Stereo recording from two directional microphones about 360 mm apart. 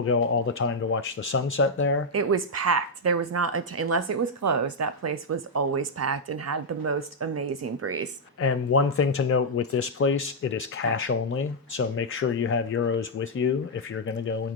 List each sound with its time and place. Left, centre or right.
0.0 s speech: left
2.1 s speech: right
8.4 s speech: left